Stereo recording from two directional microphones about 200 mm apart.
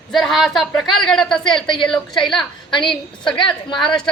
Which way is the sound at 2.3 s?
25° left (ahead or behind).